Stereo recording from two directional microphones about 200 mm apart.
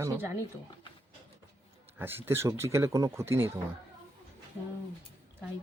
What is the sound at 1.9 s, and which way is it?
Speech, 10° right (ahead or behind).